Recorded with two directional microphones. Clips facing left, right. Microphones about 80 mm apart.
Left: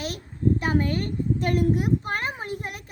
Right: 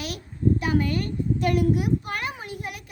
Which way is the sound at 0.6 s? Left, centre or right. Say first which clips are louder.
Even; left.